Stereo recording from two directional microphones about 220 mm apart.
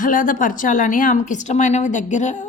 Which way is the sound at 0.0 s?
35° left (ahead or behind).